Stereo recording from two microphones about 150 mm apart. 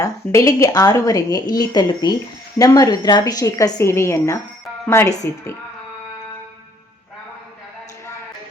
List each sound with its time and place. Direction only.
0.0 s speech: 20° left (ahead or behind)